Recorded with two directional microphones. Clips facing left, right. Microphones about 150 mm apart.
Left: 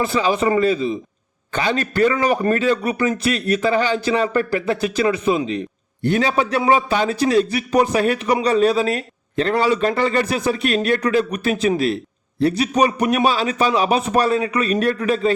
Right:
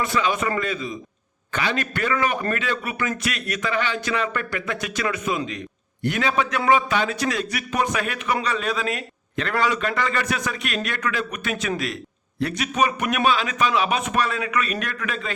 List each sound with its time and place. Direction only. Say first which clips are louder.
0.0 s a man's voice: left 5 dB; 30° left (ahead or behind)